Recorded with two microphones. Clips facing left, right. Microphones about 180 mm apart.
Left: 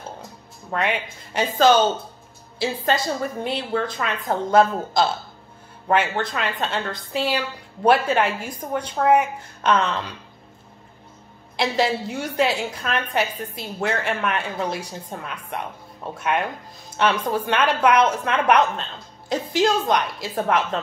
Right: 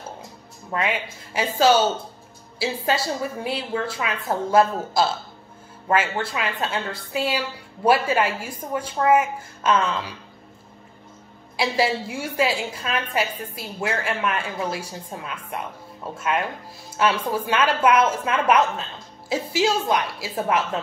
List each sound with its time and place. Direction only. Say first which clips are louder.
0.7 s a woman's voice: left 1 dB; centre (ahead or behind)
11.5 s a woman's voice: left 1 dB; 5° right (ahead or behind)